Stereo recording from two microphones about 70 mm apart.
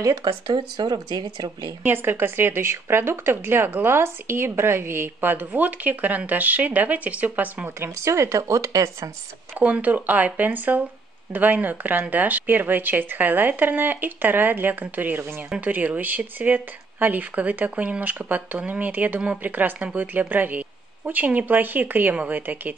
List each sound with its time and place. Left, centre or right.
0.0 s speech: right
0.3 s speech: right
1.8 s speech: right
7.8 s speech: right
9.6 s speech: right